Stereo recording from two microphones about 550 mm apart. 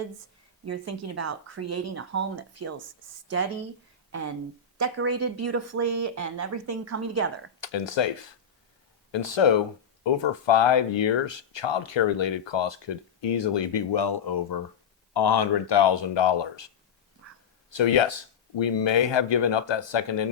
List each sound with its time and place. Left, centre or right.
0.6 s speech: right
4.8 s speech: right
7.6 s speech: left
9.1 s speech: left
17.7 s speech: left